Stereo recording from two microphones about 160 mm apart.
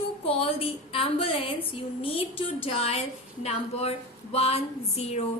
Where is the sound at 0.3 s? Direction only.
35° left (ahead or behind).